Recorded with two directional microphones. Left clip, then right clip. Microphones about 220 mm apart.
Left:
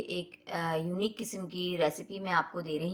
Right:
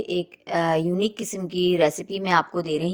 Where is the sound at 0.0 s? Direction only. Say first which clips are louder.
Right 10 dB; 35° right (ahead or behind).